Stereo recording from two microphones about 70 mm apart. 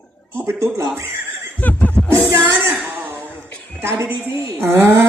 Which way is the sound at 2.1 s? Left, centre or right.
Right.